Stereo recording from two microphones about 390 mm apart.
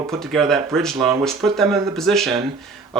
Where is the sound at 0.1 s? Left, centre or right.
Centre.